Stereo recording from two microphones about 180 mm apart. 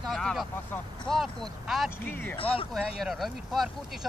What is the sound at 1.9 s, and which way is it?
Speech, 10° left (ahead or behind).